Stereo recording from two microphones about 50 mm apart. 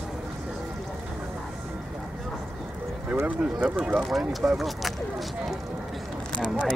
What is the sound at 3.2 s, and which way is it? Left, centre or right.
Speech, right.